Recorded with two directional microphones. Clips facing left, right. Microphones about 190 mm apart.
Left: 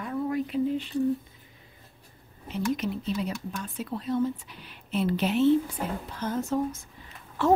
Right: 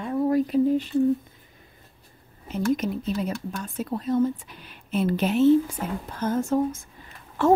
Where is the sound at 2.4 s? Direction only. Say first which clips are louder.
Right 4 dB; 45° right (ahead or behind).